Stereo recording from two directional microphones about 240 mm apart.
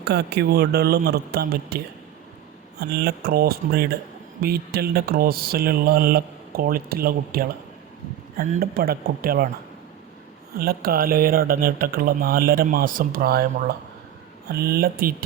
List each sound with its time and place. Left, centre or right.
0.0 s speech: right
10.6 s speech: right